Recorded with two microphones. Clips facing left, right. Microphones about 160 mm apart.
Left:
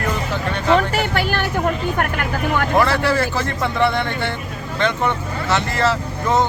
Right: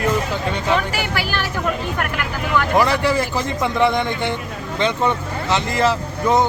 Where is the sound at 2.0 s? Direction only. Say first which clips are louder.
Left 3 dB; 45° left (ahead or behind).